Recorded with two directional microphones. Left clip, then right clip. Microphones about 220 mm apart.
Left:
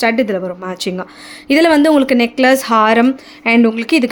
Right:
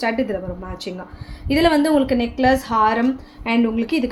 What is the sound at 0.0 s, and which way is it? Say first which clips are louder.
A woman's voice: left 7 dB; 55° left (ahead or behind).